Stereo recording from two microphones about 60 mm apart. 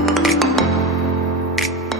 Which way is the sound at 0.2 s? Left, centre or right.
Centre.